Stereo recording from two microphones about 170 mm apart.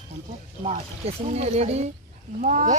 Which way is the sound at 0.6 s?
40° right (ahead or behind).